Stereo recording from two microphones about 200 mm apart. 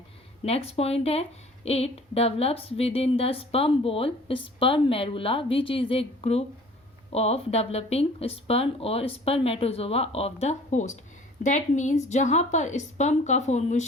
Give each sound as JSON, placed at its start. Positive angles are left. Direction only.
{"t": 0.4, "sound": "a woman's voice", "side_deg": 30}